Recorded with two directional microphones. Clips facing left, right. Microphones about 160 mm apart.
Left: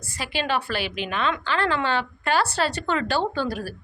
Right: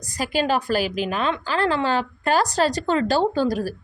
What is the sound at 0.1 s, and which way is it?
A woman's voice, 40° right (ahead or behind).